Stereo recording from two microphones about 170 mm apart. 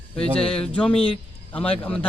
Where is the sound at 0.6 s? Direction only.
5° left (ahead or behind).